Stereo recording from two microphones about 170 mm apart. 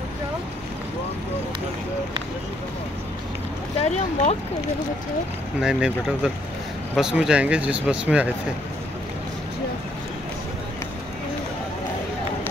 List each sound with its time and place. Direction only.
3.8 s speech: 40° left (ahead or behind)
5.6 s speech: 5° right (ahead or behind)